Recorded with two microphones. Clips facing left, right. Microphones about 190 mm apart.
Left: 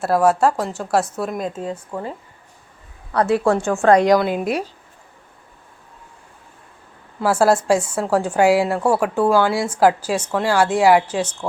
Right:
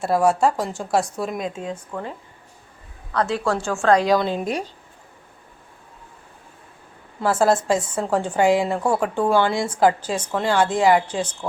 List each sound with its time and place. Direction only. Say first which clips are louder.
0.0 s a woman's voice: left 2 dB; centre (ahead or behind)
3.4 s a woman's voice: left 5 dB; 20° left (ahead or behind)
4.2 s a woman's voice: left 3 dB; 5° left (ahead or behind)
7.2 s a woman's voice: left 2 dB; 10° left (ahead or behind)